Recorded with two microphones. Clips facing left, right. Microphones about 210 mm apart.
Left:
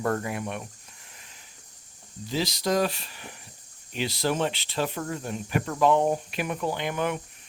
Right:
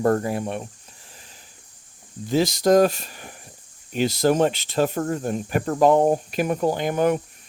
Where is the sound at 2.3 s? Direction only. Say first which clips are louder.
Right 9 dB; 50° right (ahead or behind).